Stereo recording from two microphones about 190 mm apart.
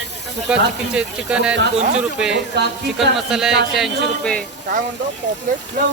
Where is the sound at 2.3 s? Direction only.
65° right (ahead or behind).